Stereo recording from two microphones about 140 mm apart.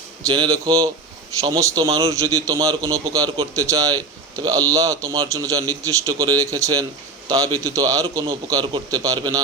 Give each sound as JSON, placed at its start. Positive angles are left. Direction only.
{"t": 0.3, "sound": "a man's voice", "side_deg": -30}